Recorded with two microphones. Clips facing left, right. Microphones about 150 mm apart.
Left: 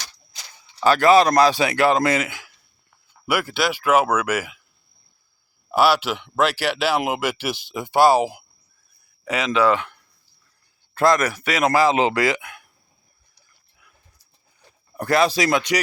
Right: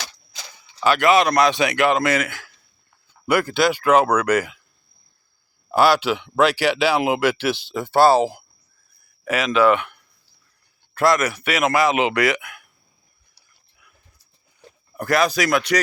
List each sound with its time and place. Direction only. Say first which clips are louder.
0.9 s a man's voice: left 2 dB; 35° left (ahead or behind); by 2.6 s 15° left (ahead or behind)
3.2 s speech: right 4 dB; 5° left (ahead or behind)
5.7 s a man's voice: right 2 dB; 5° left (ahead or behind); by 12.7 s 30° left (ahead or behind)
14.9 s speech: left 1 dB; 30° left (ahead or behind)